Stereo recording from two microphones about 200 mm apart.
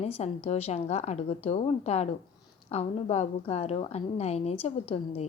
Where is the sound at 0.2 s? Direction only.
30° left (ahead or behind).